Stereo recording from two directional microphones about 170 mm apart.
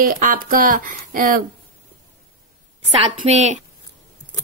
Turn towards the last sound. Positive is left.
turn(degrees=-45)  # may be behind; listen again after turning